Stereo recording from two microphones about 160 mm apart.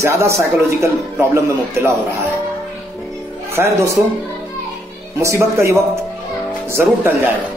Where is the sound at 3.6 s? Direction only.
15° right (ahead or behind).